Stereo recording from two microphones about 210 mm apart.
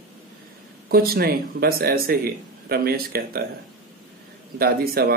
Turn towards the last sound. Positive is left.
turn(degrees=-45)  # may be behind; listen again after turning